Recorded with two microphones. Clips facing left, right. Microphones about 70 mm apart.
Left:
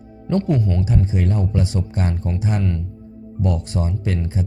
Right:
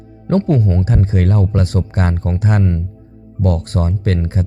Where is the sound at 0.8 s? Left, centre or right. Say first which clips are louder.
Right 4 dB; right.